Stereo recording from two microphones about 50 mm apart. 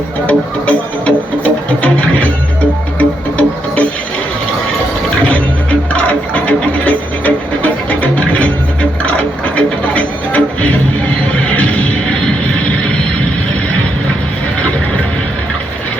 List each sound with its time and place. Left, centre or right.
0.3 s speech: left
3.0 s music: left
5.9 s music: left
9.6 s music: left